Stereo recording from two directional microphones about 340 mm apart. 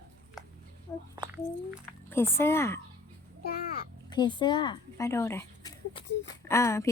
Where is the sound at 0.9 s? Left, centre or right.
Centre.